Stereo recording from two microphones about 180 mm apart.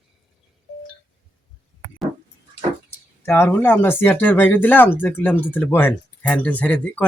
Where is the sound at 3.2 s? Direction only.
10° left (ahead or behind).